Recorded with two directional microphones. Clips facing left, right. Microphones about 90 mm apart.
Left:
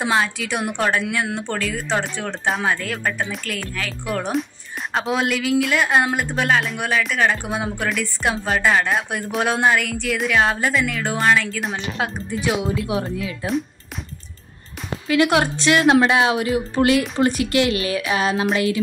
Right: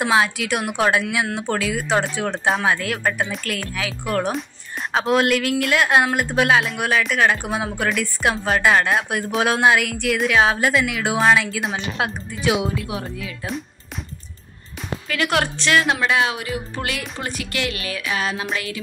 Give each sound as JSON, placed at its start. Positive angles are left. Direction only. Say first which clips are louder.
{"t": 0.0, "sound": "a woman's voice", "louder": "right 2 dB", "side_deg": -5}
{"t": 15.0, "sound": "speech", "louder": "left 5 dB", "side_deg": 20}
{"t": 16.3, "sound": "a woman's voice", "louder": "left 8 dB", "side_deg": 25}